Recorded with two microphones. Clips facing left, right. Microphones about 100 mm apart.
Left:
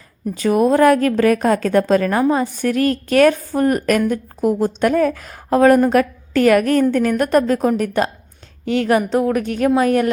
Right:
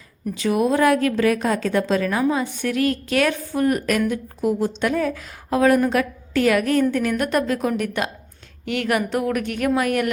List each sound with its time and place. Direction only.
0.3 s a woman's voice: 45° left (ahead or behind)